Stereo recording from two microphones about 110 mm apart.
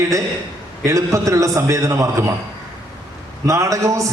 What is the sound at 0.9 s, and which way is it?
A man's voice, 30° right (ahead or behind).